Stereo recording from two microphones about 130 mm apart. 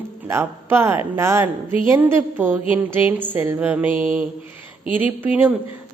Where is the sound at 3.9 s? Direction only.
45° left (ahead or behind).